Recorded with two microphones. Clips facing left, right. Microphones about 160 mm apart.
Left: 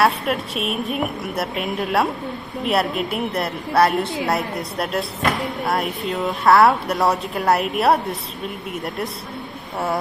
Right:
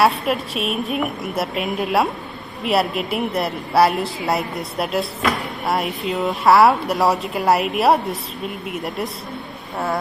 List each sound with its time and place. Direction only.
0.0 s speech: centre (ahead or behind)